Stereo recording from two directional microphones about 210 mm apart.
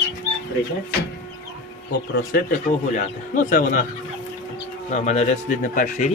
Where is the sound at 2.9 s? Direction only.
40° left (ahead or behind).